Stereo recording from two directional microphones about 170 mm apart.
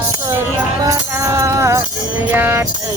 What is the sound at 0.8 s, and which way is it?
Music, 20° right (ahead or behind).